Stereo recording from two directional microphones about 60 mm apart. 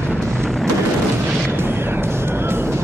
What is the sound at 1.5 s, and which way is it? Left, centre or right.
Music, right.